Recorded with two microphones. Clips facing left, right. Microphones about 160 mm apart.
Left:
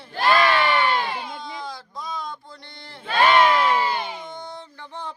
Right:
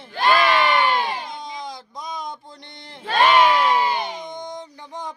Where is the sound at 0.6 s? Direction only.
15° right (ahead or behind).